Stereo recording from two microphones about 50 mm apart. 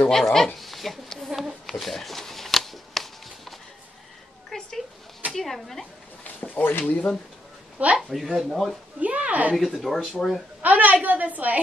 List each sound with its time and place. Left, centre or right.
0.1 s speech: centre
1.0 s a sound: centre
1.3 s shuffling cards: centre
4.5 s a sound: centre
5.3 s speech: centre
6.4 s speech: left
8.1 s speech: centre
8.5 s speech: centre
9.0 s a woman's voice: right
9.6 s speech: centre
10.6 s a woman's voice: right